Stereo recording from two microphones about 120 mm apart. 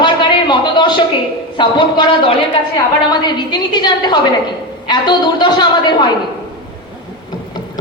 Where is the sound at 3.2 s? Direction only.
35° left (ahead or behind).